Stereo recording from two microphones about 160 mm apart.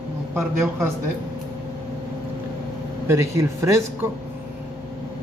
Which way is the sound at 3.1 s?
20° right (ahead or behind).